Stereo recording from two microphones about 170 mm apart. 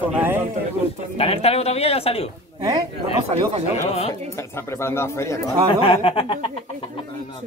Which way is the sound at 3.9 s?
35° left (ahead or behind).